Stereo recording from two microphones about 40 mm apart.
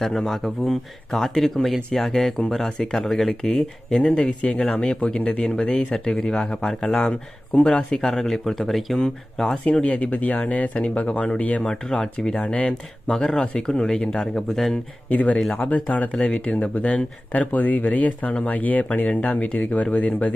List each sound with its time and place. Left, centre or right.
0.0 s speech: centre
4.1 s speech: left
5.4 s speech: centre
5.7 s speech: left
5.9 s speech: centre
9.8 s speech: left
11.6 s speech: centre
15.0 s speech: left